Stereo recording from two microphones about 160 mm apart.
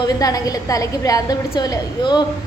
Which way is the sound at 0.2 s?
20° left (ahead or behind).